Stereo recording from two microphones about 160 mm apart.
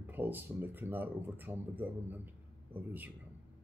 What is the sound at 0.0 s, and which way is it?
Speech, 10° right (ahead or behind).